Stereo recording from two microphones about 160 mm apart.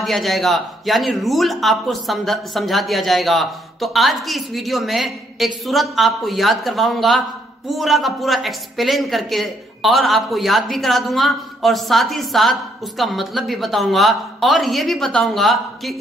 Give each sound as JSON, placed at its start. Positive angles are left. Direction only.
{"t": 0.0, "sound": "a woman's voice", "side_deg": 0}